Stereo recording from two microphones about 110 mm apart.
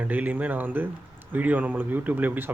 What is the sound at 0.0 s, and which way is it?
Speech, 15° right (ahead or behind).